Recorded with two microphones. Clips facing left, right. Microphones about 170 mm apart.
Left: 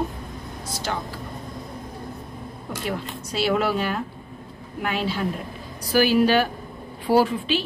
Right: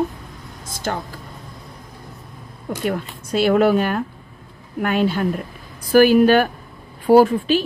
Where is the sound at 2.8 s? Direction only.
50° right (ahead or behind).